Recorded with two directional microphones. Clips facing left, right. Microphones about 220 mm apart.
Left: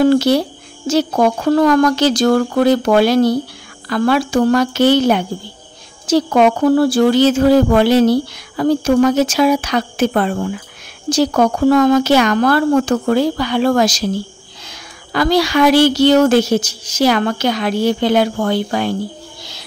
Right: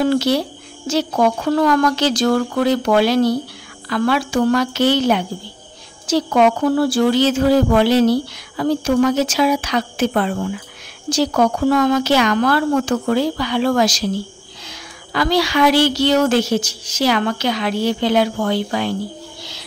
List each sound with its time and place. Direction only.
0.0 s a woman's voice: 45° left (ahead or behind)